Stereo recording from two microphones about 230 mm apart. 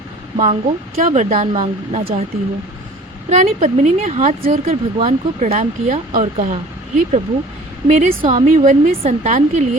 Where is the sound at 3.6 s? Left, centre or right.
Right.